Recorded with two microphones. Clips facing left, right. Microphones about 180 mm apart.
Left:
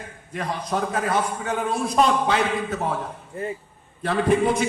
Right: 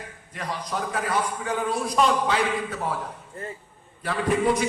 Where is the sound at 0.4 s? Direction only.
25° left (ahead or behind).